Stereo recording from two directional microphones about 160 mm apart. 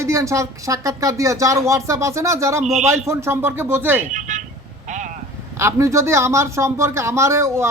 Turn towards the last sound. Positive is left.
turn(degrees=-15)  # may be behind; listen again after turning